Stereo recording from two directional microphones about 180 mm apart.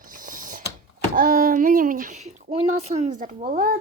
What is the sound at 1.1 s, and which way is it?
Speech, 50° right (ahead or behind).